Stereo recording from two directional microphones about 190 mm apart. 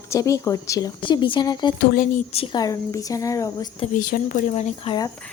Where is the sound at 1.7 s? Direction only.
50° left (ahead or behind).